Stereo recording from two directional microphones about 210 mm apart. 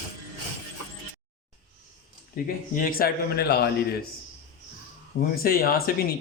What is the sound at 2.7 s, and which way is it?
Speech, 45° left (ahead or behind).